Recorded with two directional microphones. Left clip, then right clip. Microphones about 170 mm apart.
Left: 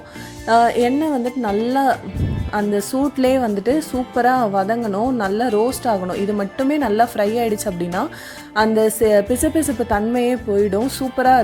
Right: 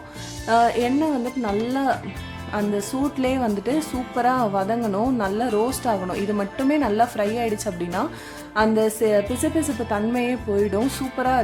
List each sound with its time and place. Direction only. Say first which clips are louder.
0.4 s a woman's voice: left 4 dB; 35° left (ahead or behind)
5.5 s speech: left 5 dB; centre (ahead or behind)
5.8 s a woman's voice: left 4 dB; 25° left (ahead or behind)